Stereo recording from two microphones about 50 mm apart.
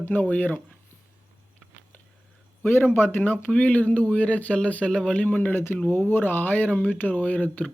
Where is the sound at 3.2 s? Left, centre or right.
Left.